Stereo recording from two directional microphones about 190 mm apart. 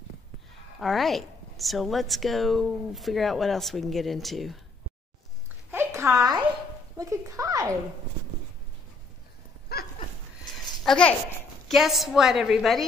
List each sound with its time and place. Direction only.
0.7 s a woman's voice: centre (ahead or behind)
5.7 s a sound: 15° right (ahead or behind)
7.0 s speech: 15° right (ahead or behind)
9.7 s dog: 55° left (ahead or behind)
10.8 s a child's voice: 5° left (ahead or behind)